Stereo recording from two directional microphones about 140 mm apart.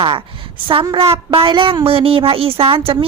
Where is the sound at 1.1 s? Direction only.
40° right (ahead or behind).